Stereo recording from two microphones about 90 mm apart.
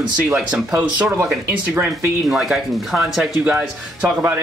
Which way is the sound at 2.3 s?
Centre (ahead or behind).